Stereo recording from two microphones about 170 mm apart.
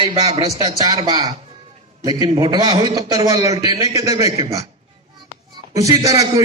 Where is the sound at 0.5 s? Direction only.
20° right (ahead or behind).